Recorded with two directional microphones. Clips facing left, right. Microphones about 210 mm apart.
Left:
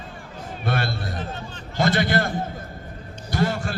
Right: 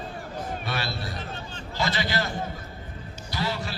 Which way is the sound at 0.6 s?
50° left (ahead or behind).